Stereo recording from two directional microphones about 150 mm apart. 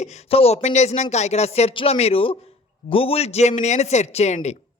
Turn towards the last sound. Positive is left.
turn(degrees=50)  # may be behind; listen again after turning